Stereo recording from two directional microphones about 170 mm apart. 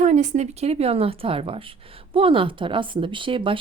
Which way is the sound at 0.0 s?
45° right (ahead or behind).